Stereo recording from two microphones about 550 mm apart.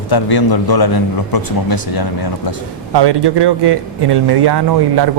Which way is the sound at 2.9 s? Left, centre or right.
Right.